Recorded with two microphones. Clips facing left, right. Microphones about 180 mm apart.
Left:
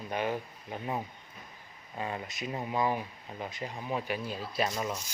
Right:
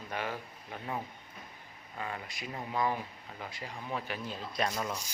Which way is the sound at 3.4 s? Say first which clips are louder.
Left 4 dB; 20° left (ahead or behind).